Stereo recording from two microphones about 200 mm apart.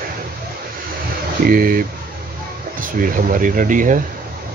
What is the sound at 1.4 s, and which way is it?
Speech, 45° right (ahead or behind).